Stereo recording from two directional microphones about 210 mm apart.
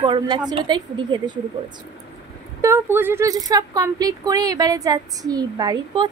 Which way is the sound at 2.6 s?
10° right (ahead or behind).